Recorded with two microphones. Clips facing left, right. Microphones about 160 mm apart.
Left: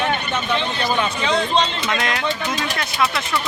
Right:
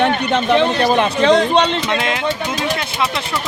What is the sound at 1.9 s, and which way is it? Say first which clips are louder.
Speech: right 3 dB; 20° right (ahead or behind).